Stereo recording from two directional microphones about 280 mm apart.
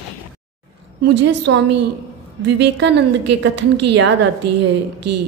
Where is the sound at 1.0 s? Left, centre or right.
Right.